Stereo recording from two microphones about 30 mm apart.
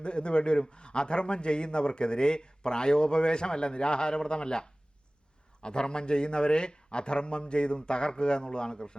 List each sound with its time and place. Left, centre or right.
0.0 s a man's voice: left